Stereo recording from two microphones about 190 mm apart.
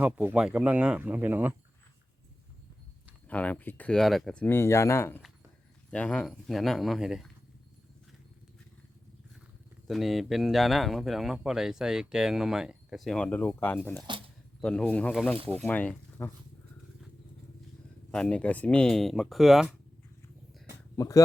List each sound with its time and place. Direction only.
0.0 s speech: 10° right (ahead or behind)
3.2 s speech: 5° left (ahead or behind)
9.8 s speech: centre (ahead or behind)
18.1 s speech: 5° left (ahead or behind)
20.9 s speech: 15° left (ahead or behind)